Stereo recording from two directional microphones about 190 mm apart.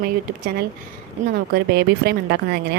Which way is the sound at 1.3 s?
60° right (ahead or behind).